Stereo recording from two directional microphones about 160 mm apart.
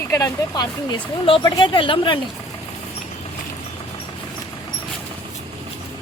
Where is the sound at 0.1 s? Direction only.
20° left (ahead or behind).